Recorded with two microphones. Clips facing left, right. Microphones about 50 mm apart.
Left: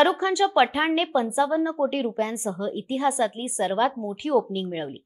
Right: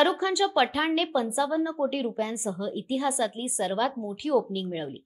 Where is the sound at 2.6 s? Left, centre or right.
Left.